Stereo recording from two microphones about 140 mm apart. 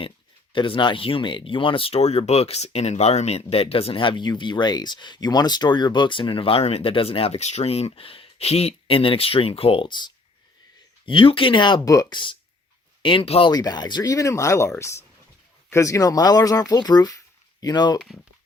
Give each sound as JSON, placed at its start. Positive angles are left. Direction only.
{"t": 0.5, "sound": "speech", "side_deg": 35}
{"t": 13.5, "sound": "speech", "side_deg": 25}